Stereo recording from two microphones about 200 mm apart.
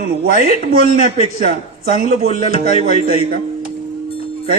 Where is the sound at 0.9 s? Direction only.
35° left (ahead or behind).